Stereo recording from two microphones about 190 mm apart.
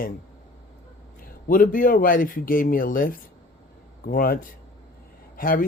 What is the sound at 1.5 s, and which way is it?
Speech, 45° left (ahead or behind).